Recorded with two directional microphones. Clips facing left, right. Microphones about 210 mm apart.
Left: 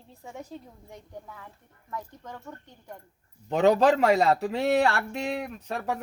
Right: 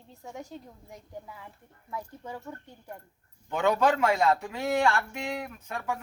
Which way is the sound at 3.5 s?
35° left (ahead or behind).